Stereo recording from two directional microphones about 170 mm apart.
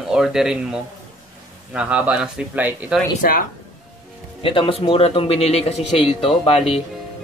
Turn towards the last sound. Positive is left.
turn(degrees=30)  # may be behind; listen again after turning